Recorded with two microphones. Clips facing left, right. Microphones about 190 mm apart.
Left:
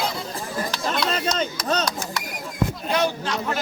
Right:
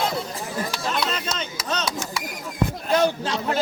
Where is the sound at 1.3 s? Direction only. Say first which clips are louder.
Left 5 dB; 40° left (ahead or behind).